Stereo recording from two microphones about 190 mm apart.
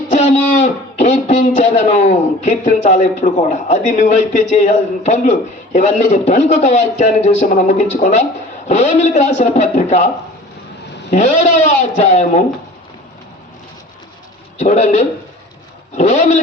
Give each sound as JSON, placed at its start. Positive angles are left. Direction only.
{"t": 0.1, "sound": "speech", "side_deg": 40}
{"t": 11.1, "sound": "speech", "side_deg": 40}
{"t": 14.6, "sound": "speech", "side_deg": 40}